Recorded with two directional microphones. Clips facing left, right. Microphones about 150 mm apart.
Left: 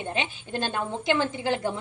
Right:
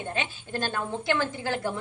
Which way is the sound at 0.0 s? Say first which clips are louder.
Left 2 dB; 20° left (ahead or behind).